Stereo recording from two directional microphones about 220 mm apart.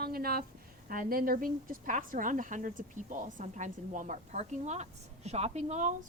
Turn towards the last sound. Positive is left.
turn(degrees=-30)  # may be behind; listen again after turning